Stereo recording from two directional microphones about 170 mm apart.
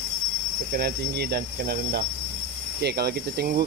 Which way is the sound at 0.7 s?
70° right (ahead or behind).